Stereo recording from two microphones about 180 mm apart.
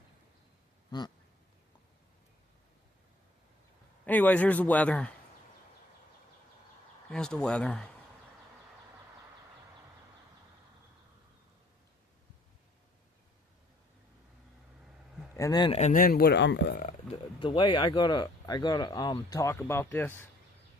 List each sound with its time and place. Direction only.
0.9 s speech: 25° left (ahead or behind)
4.0 s a man's voice: 10° left (ahead or behind)
7.1 s speech: 5° left (ahead or behind)
15.4 s speech: 20° left (ahead or behind)
15.8 s speech: 50° left (ahead or behind); by 16.7 s 75° left (ahead or behind)
17.1 s speech: 25° left (ahead or behind)